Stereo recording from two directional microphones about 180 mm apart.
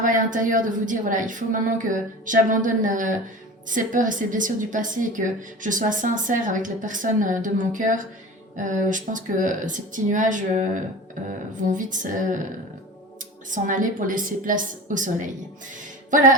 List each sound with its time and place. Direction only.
0.0 s a woman's voice: 45° right (ahead or behind)
13.5 s a woman's voice: 45° right (ahead or behind)
15.8 s music: 45° right (ahead or behind)